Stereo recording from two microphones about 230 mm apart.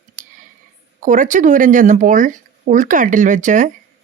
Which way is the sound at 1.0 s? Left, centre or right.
Right.